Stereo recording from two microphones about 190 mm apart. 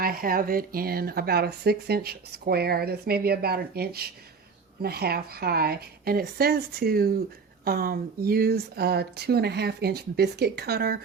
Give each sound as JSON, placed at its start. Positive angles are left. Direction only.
{"t": 0.0, "sound": "speech", "side_deg": -50}